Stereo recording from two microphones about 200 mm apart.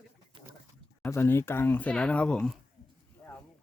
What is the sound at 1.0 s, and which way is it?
Speech, 10° left (ahead or behind).